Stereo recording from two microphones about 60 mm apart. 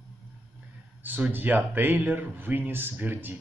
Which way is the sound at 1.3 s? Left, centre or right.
Right.